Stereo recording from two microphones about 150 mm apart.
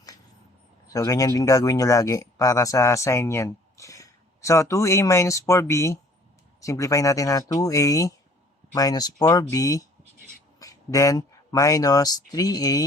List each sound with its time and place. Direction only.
0.9 s speech: 20° left (ahead or behind)